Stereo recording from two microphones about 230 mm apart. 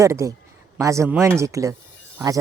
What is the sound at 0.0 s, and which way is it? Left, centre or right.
Speech, centre.